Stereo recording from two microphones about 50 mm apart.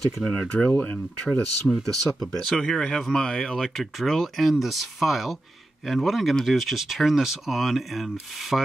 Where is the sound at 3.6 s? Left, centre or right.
Centre.